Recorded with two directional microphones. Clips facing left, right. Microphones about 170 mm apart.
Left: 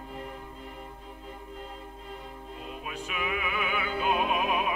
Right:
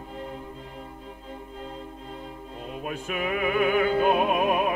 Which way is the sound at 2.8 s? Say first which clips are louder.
Right 6 dB; 45° right (ahead or behind).